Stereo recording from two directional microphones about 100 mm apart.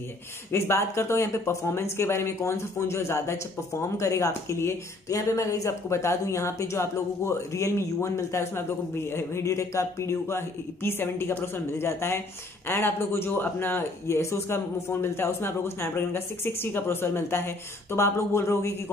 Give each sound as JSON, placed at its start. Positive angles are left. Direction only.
{"t": 0.5, "sound": "speech", "side_deg": 25}